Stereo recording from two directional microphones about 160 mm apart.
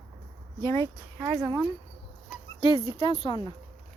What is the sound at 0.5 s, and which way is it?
Speech, 20° left (ahead or behind).